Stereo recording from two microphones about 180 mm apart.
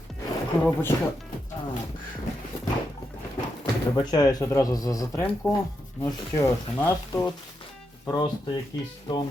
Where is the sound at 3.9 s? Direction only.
25° left (ahead or behind).